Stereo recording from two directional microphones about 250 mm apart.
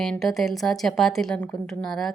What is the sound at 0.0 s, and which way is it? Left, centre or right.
Speech, centre.